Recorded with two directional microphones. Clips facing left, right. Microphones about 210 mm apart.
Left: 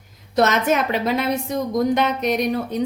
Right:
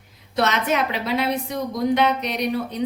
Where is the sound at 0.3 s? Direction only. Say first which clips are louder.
Left 3 dB; 45° left (ahead or behind).